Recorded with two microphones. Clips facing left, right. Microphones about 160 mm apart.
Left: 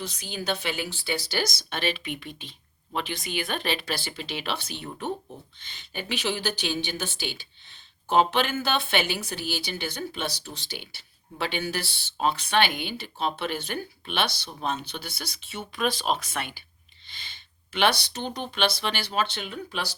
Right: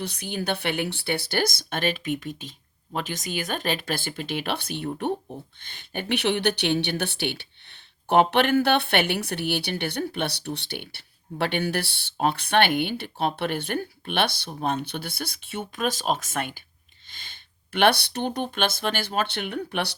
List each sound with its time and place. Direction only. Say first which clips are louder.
0.0 s speech: right 3 dB; 60° right (ahead or behind)